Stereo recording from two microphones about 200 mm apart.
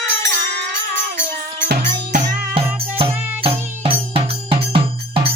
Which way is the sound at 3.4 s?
30° right (ahead or behind).